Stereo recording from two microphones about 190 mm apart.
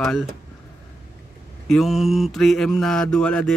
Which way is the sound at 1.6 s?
Centre (ahead or behind).